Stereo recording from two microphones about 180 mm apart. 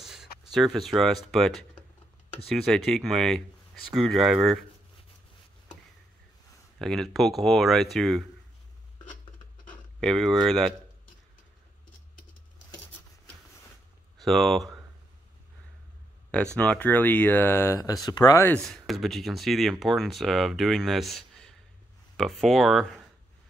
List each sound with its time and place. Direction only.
0.0 s speech: centre (ahead or behind)
6.8 s speech: centre (ahead or behind)
9.9 s speech: 5° left (ahead or behind)
14.2 s speech: centre (ahead or behind)
16.5 s speech: 10° left (ahead or behind)
18.6 s speech: centre (ahead or behind)